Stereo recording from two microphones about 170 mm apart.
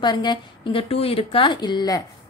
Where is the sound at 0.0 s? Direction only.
25° left (ahead or behind).